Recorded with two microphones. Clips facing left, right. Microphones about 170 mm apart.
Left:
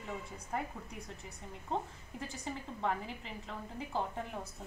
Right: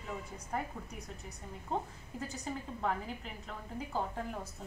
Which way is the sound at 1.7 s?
Centre (ahead or behind).